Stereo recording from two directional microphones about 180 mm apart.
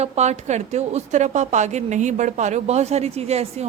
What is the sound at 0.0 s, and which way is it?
Speech, 40° right (ahead or behind).